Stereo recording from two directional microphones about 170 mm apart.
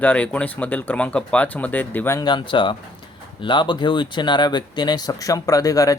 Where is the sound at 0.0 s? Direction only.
10° left (ahead or behind).